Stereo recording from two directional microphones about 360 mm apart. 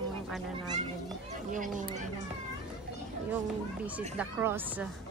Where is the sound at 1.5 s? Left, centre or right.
Right.